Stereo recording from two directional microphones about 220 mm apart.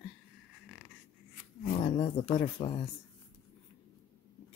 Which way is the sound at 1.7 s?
25° left (ahead or behind).